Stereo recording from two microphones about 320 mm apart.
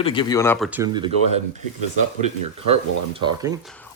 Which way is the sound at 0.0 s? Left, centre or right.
Centre.